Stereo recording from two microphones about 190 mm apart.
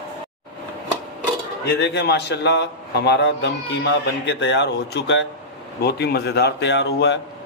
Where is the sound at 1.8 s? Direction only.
60° left (ahead or behind).